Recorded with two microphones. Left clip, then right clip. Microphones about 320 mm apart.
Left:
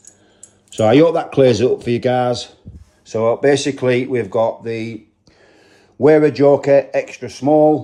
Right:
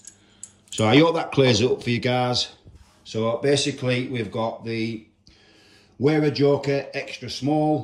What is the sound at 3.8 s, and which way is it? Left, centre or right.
Speech, left.